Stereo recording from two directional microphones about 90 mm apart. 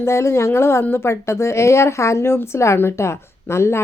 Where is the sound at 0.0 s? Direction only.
30° left (ahead or behind).